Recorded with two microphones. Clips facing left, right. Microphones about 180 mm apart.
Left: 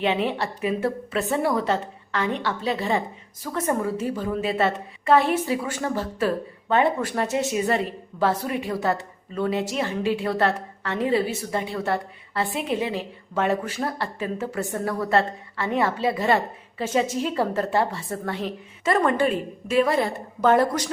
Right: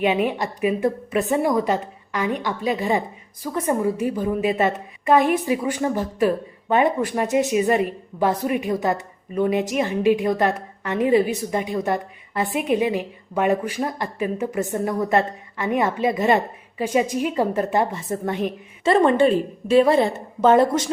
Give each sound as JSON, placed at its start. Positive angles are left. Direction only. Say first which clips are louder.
{"t": 0.0, "sound": "a woman's voice", "louder": "right 3 dB", "side_deg": -15}